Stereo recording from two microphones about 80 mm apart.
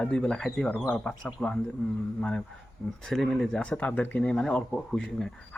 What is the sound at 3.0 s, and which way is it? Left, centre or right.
Speech, centre.